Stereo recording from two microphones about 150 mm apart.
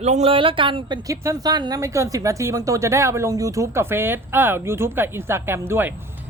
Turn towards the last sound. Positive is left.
turn(degrees=-15)  # may be behind; listen again after turning